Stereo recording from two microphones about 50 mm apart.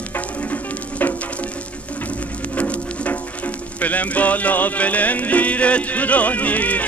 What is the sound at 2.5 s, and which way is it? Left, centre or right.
Music, left.